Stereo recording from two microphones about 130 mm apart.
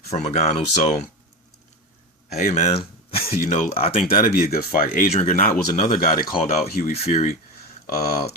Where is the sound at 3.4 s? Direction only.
80° left.